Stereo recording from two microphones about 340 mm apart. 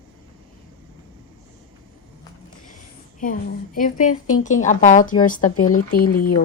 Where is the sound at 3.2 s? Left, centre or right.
Left.